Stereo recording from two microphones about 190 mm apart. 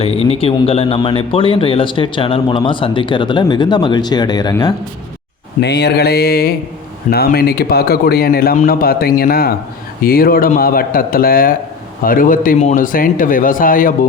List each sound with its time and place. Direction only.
0.0 s speech: 30° left (ahead or behind)
5.5 s a sound: 60° left (ahead or behind)
7.1 s a man's voice: 55° left (ahead or behind)